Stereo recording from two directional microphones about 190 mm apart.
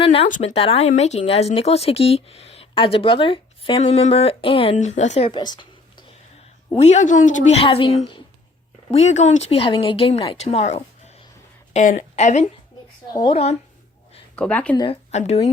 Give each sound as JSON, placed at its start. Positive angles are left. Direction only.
{"t": 0.0, "sound": "speech", "side_deg": 30}
{"t": 5.3, "sound": "a sound", "side_deg": 25}
{"t": 6.8, "sound": "speech", "side_deg": 40}
{"t": 13.1, "sound": "speech", "side_deg": 25}
{"t": 14.3, "sound": "speech", "side_deg": 5}
{"t": 14.8, "sound": "speech", "side_deg": 30}